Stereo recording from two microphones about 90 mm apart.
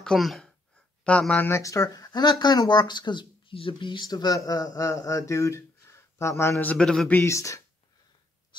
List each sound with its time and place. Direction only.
0.0 s speech: 5° left (ahead or behind)
0.7 s a sound: 10° left (ahead or behind)
1.5 s speech: 35° left (ahead or behind)
6.6 s a man's voice: 10° left (ahead or behind)
7.2 s speech: 35° left (ahead or behind)